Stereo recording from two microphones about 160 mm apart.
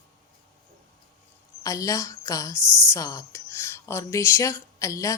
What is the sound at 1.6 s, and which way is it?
Speech, 20° left (ahead or behind).